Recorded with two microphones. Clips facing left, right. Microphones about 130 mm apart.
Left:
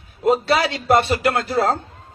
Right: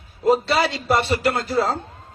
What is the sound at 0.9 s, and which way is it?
Speech, 60° left (ahead or behind).